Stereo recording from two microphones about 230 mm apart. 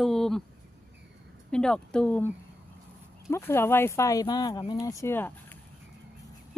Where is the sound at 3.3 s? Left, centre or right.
Centre.